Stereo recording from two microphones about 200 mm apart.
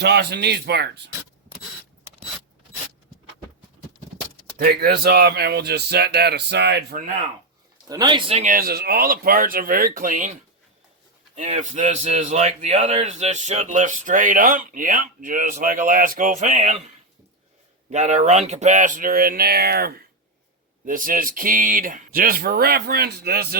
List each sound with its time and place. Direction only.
0.0 s speech: 55° right (ahead or behind)
4.5 s speech: 50° right (ahead or behind)
7.9 s speech: 20° right (ahead or behind)
8.4 s speech: 45° right (ahead or behind)
11.3 s speech: 35° right (ahead or behind)
17.9 s speech: 35° right (ahead or behind); by 23.6 s 50° right (ahead or behind)